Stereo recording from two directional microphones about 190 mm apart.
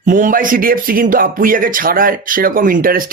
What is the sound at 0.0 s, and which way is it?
Speech, 45° right (ahead or behind).